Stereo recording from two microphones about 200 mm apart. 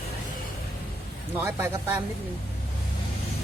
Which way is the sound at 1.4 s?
15° right (ahead or behind).